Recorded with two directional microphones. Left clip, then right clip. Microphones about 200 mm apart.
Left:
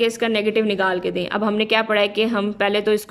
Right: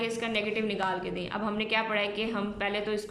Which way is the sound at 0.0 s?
45° left (ahead or behind).